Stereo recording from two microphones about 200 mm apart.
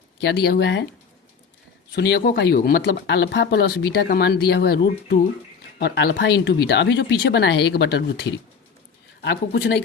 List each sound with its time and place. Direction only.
0.2 s speech: 55° left (ahead or behind)
2.0 s speech: 55° left (ahead or behind)